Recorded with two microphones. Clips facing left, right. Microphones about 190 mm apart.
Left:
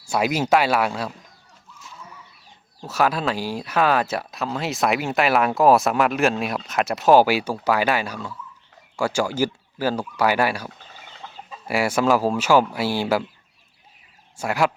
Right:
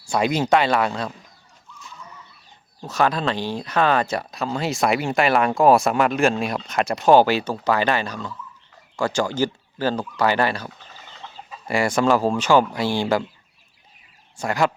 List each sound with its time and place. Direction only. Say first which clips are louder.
0.0 s speech: right 1 dB; 5° left (ahead or behind)
2.8 s speech: even; 5° left (ahead or behind)
11.7 s speech: right 1 dB; 5° left (ahead or behind)
14.3 s speech: even; 5° left (ahead or behind)